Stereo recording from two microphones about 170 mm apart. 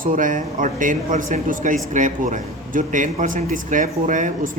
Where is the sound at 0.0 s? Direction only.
55° right (ahead or behind).